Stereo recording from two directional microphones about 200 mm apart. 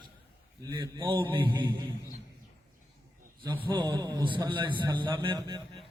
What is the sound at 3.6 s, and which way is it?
A man's voice, 20° right (ahead or behind).